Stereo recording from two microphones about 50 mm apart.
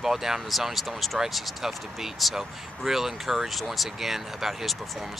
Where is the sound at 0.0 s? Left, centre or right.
Centre.